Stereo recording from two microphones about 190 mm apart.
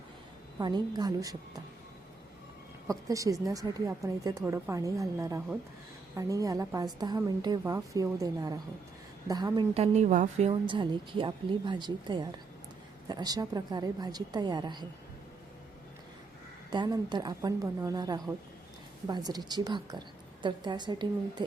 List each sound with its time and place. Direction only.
0.6 s a woman's voice: 20° right (ahead or behind)
2.8 s a woman's voice: 15° right (ahead or behind)
16.6 s a woman's voice: 25° right (ahead or behind)